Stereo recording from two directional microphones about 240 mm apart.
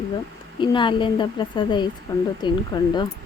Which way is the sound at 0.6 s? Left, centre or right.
Centre.